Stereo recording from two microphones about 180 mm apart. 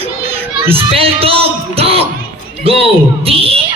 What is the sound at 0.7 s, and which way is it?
A man's voice, 30° right (ahead or behind).